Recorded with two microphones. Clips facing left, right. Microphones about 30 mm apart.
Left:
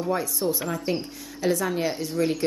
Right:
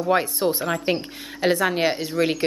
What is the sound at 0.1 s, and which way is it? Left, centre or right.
Speech, right.